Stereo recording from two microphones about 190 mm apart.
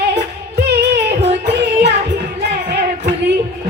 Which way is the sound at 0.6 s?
60° right (ahead or behind).